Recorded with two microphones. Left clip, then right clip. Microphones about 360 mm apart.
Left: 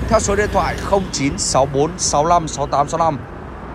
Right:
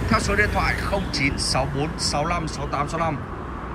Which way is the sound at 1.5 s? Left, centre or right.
Left.